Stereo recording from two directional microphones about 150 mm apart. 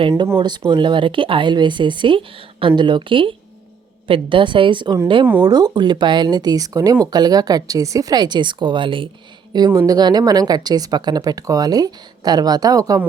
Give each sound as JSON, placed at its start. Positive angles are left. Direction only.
{"t": 0.3, "sound": "a woman's voice", "side_deg": -30}